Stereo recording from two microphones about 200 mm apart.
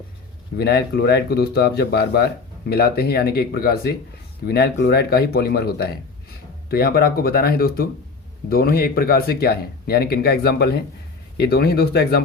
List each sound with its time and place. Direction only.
0.6 s speech: 55° left (ahead or behind)